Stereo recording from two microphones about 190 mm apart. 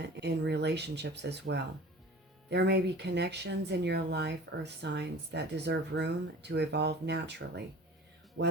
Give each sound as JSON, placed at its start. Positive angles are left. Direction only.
{"t": 0.2, "sound": "speech", "side_deg": -60}